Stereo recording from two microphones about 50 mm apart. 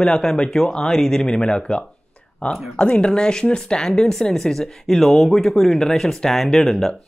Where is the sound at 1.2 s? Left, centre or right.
Centre.